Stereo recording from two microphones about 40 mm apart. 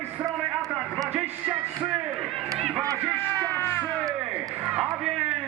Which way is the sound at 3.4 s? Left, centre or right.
Left.